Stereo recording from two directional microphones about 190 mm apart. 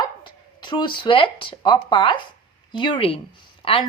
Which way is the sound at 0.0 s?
25° left (ahead or behind).